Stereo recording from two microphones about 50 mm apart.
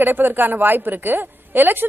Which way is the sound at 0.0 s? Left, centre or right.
Right.